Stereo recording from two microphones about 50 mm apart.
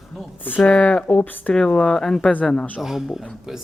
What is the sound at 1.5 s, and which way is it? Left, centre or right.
Speech, centre.